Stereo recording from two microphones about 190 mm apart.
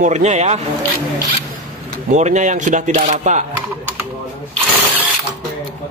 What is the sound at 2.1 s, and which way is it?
Speech, 40° right (ahead or behind).